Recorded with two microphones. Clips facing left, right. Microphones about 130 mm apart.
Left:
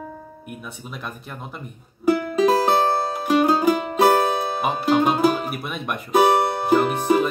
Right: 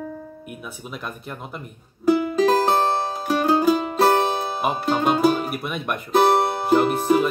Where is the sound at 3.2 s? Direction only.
15° left (ahead or behind).